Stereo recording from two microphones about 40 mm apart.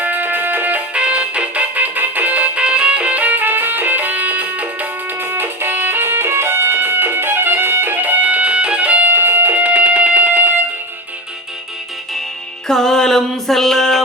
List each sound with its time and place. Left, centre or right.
0.0 s music: right
0.9 s music: right
1.7 s music: right
2.6 s music: right
5.2 s music: right
8.2 s music: right
8.4 s music: right
9.0 s music: right
12.6 s music: centre